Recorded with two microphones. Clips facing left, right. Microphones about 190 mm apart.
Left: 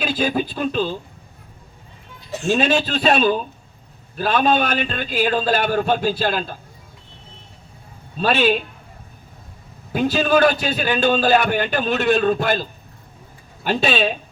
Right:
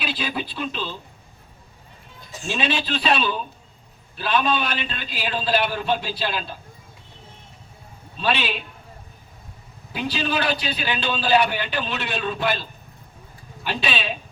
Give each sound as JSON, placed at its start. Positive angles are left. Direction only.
{"t": 0.0, "sound": "a man's voice", "side_deg": 45}
{"t": 2.5, "sound": "a man's voice", "side_deg": 45}
{"t": 8.2, "sound": "a man's voice", "side_deg": 45}
{"t": 9.9, "sound": "a man's voice", "side_deg": 45}
{"t": 13.7, "sound": "a man's voice", "side_deg": 45}